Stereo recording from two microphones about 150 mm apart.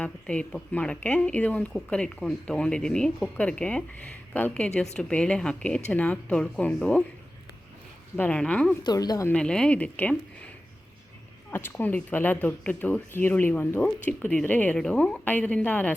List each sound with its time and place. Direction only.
0.0 s speech: 5° left (ahead or behind)
8.1 s speech: 10° left (ahead or behind)
8.8 s speech: 25° left (ahead or behind)
9.3 s speech: 5° left (ahead or behind)
11.5 s speech: 15° left (ahead or behind)